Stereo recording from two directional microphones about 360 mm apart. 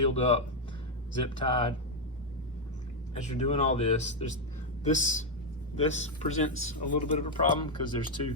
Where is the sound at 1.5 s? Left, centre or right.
Centre.